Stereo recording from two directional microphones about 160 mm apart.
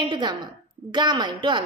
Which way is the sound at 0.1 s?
30° right (ahead or behind).